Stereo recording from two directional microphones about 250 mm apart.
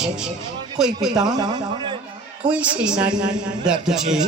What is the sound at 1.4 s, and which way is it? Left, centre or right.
Speech, centre.